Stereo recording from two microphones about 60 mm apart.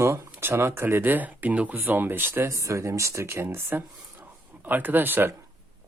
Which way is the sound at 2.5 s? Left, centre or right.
Right.